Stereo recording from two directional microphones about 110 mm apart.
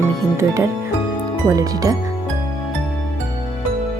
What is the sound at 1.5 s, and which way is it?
Speech, 35° right (ahead or behind).